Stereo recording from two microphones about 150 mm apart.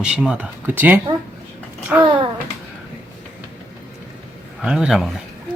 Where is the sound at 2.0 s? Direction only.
35° right (ahead or behind).